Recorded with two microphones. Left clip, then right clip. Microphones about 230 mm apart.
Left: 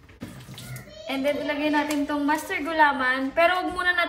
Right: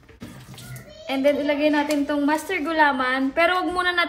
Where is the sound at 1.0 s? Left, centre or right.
Right.